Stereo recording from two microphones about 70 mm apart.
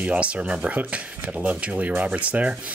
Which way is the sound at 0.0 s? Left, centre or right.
Centre.